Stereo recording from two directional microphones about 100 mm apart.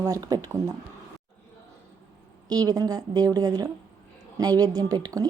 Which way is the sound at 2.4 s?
40° right (ahead or behind).